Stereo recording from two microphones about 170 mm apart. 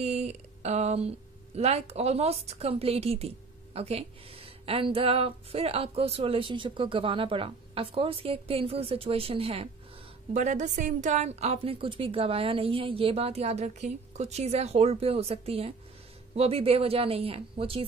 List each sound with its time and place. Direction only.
0.0 s a woman's voice: 40° right (ahead or behind)
10.3 s a woman's voice: 45° right (ahead or behind)